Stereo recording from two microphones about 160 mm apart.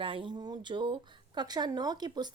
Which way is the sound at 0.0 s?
30° right (ahead or behind).